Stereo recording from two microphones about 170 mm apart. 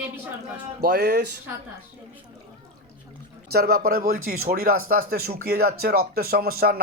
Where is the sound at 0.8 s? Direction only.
75° right (ahead or behind).